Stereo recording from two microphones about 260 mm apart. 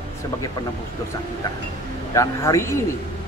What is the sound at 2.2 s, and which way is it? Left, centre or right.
Speech, centre.